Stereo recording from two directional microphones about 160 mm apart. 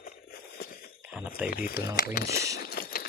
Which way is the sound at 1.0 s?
5° right (ahead or behind).